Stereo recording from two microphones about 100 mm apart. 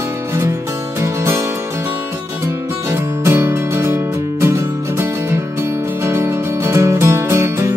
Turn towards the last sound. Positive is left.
turn(degrees=-30)  # may be behind; listen again after turning